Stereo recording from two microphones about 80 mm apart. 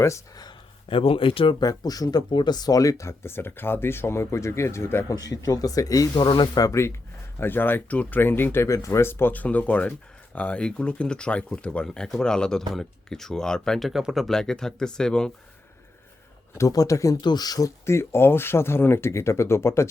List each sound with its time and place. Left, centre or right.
0.3 s a sound: left
1.6 s speech: left
5.0 s speech: left
7.3 s speech: left
8.7 s speech: left; by 14.3 s centre
14.3 s speech: centre
16.6 s speech: left
17.2 s speech: left
17.8 s speech: left